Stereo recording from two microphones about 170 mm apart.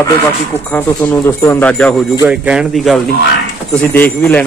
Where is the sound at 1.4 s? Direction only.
10° left (ahead or behind).